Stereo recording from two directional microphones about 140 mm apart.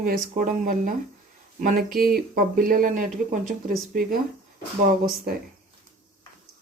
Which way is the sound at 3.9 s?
90° right.